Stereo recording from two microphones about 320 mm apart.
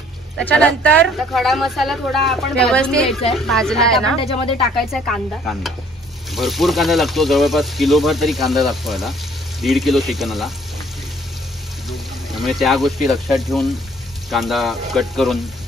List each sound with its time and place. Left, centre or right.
0.4 s speech: centre
12.3 s speech: centre